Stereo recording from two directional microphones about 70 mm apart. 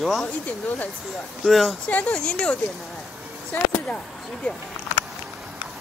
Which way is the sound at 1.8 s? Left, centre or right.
Centre.